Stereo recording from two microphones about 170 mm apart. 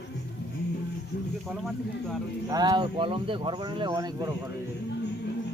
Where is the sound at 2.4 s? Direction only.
20° right (ahead or behind).